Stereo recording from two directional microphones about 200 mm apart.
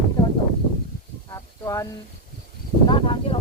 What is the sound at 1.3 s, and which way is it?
Speech, 15° left (ahead or behind).